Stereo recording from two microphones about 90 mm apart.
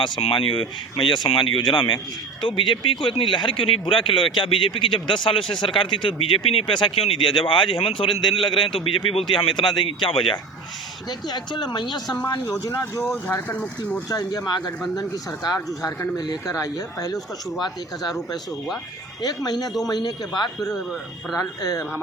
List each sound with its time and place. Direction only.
0.0 s a man's voice: 80° left
9.3 s speech: 65° left (ahead or behind)
9.8 s a man's voice: 70° left (ahead or behind)
11.3 s speech: 55° left (ahead or behind)
13.5 s speech: 15° left (ahead or behind)
14.1 s speech: 45° left (ahead or behind)
19.2 s speech: 45° left (ahead or behind)
21.3 s speech: 40° left (ahead or behind)